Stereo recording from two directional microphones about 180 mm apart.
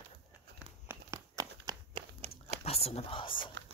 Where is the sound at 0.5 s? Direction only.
15° right (ahead or behind).